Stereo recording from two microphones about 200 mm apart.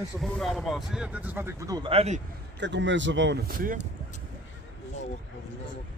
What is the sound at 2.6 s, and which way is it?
Speech, 65° right (ahead or behind).